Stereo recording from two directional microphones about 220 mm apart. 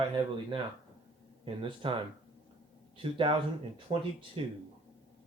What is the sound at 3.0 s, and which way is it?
Speech, 25° right (ahead or behind).